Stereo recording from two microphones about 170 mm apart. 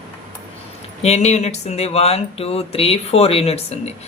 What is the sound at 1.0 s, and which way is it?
Speech, 40° left (ahead or behind).